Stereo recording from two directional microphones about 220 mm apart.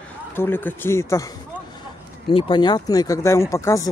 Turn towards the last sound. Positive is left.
turn(degrees=15)  # may be behind; listen again after turning